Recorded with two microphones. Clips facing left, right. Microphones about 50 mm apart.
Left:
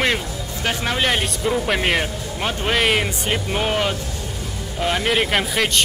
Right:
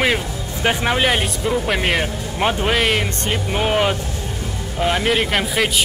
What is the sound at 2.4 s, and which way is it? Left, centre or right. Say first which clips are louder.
Speech: right 6 dB; centre.